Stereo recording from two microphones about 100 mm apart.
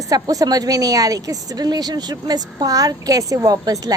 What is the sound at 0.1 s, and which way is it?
A woman's voice, 35° right (ahead or behind).